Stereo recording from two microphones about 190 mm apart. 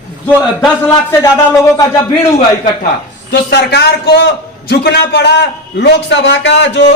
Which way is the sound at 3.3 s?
60° left (ahead or behind).